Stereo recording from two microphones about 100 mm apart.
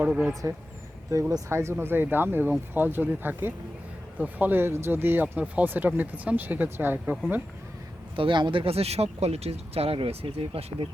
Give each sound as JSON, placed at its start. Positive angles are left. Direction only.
{"t": 0.0, "sound": "speech", "side_deg": -10}
{"t": 1.5, "sound": "speech", "side_deg": -25}
{"t": 8.1, "sound": "speech", "side_deg": -55}